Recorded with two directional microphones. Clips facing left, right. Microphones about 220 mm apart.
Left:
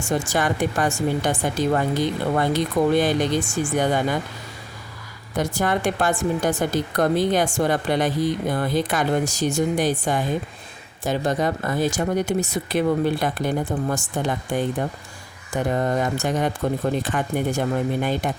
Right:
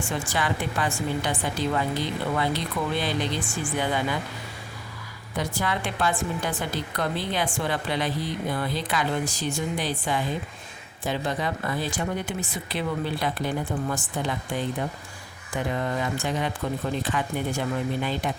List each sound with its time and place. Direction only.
0.0 s a woman's voice: 45° left (ahead or behind)
5.4 s a woman's voice: 45° left (ahead or behind)